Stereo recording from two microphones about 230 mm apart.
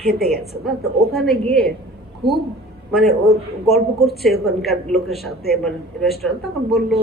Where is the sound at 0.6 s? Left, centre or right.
Centre.